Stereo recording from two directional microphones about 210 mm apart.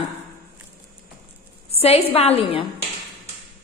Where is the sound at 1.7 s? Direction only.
30° left (ahead or behind).